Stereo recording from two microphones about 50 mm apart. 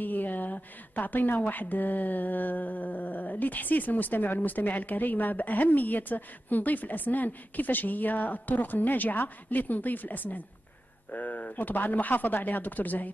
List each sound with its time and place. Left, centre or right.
0.0 s a woman's voice: left